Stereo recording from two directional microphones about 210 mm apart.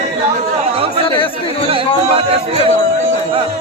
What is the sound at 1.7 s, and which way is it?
Speech, 25° right (ahead or behind).